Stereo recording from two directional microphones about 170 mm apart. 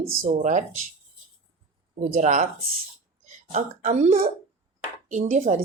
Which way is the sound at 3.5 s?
45° right (ahead or behind).